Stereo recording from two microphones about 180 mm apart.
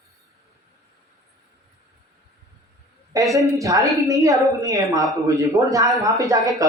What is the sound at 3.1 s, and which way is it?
A woman's voice, 20° right (ahead or behind).